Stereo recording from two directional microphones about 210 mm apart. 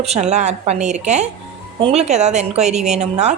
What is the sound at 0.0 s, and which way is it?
A woman's voice, 30° right (ahead or behind).